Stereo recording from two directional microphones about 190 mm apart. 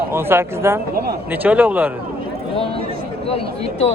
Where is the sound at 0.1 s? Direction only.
10° right (ahead or behind).